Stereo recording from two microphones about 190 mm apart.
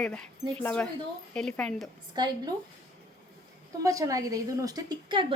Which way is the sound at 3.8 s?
15° right (ahead or behind).